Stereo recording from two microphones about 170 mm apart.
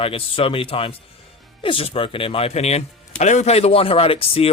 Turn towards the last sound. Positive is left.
turn(degrees=35)  # may be behind; listen again after turning